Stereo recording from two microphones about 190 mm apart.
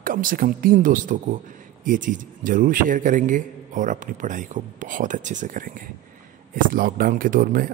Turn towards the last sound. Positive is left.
turn(degrees=-45)  # may be behind; listen again after turning